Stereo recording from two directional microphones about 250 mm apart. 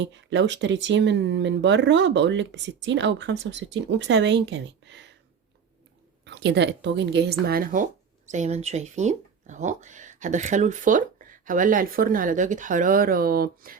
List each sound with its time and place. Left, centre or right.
0.0 s speech: right
6.2 s speech: right